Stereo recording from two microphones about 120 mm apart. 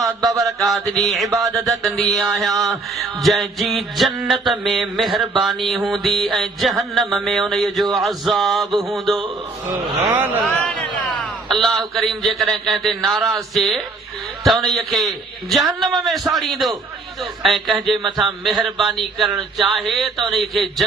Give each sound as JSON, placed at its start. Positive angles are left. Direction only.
{"t": 0.2, "sound": "a sound", "side_deg": -30}
{"t": 0.4, "sound": "mantra", "side_deg": 0}
{"t": 10.4, "sound": "a man's voice", "side_deg": 0}
{"t": 14.4, "sound": "mantra", "side_deg": 0}